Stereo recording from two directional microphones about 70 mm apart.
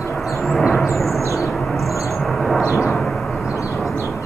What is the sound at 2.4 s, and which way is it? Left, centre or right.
Vehicle, centre.